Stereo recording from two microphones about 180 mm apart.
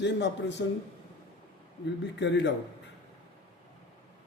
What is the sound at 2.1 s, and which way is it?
Speech, 75° left (ahead or behind).